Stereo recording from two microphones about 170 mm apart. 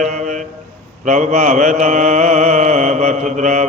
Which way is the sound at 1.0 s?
45° right (ahead or behind).